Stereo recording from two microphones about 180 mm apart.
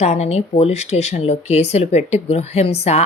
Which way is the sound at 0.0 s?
35° left (ahead or behind).